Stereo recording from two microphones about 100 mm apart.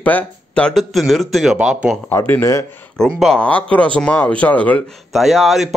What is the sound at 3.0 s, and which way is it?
Speech, 5° left (ahead or behind).